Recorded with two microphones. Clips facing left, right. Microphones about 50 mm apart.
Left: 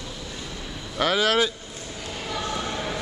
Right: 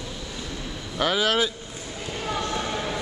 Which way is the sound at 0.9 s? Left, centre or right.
Centre.